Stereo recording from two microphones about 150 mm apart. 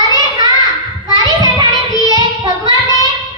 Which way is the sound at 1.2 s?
25° right (ahead or behind).